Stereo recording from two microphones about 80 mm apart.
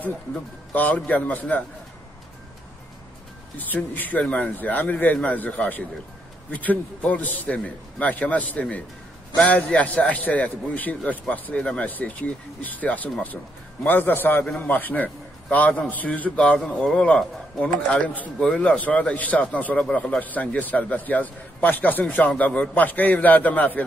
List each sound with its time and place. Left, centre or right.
0.7 s speech: centre
3.5 s a man's voice: left